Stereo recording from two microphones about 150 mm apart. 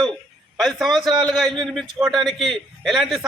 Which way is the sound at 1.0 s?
30° right (ahead or behind).